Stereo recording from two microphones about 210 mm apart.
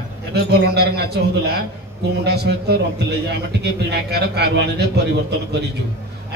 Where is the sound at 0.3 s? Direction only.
50° right (ahead or behind).